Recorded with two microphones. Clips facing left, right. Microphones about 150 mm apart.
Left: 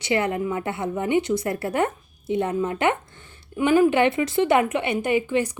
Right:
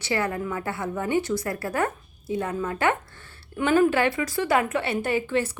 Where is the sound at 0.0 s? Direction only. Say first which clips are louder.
Left 4 dB; 20° left (ahead or behind).